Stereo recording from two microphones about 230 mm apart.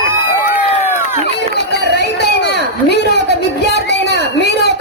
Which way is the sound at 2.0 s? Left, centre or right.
Left.